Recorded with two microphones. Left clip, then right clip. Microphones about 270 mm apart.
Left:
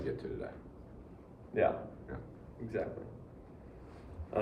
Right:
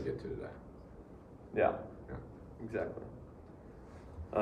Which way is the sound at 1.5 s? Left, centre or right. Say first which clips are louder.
Even; centre.